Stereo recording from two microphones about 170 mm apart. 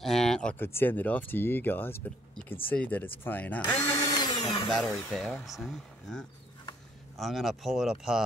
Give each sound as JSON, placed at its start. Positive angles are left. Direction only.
{"t": 0.0, "sound": "speech", "side_deg": 5}
{"t": 4.0, "sound": "drill", "side_deg": 25}
{"t": 4.6, "sound": "speech", "side_deg": 0}